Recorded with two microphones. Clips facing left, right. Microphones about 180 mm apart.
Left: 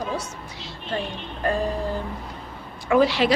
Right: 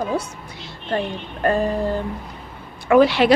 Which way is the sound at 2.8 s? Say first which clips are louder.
Right 5 dB; 65° right (ahead or behind).